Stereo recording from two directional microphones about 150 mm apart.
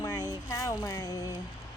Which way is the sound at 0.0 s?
25° left (ahead or behind).